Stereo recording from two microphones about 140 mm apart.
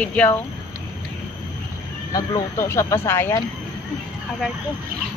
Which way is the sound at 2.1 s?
25° left (ahead or behind).